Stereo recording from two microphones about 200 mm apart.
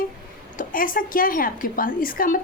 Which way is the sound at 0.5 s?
40° left (ahead or behind).